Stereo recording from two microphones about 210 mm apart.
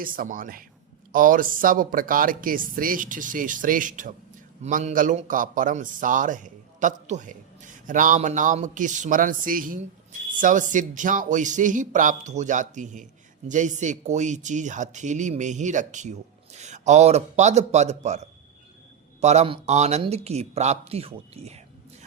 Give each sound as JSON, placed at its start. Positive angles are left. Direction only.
{"t": 0.0, "sound": "a man's voice", "side_deg": -40}